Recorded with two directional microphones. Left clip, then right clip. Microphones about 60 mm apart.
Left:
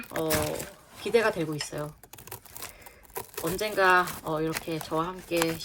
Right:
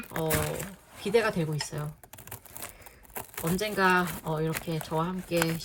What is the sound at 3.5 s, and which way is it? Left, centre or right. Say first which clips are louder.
Speech: left 3 dB; left.